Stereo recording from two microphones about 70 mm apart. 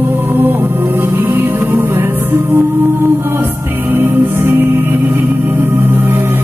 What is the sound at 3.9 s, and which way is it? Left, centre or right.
Music, right.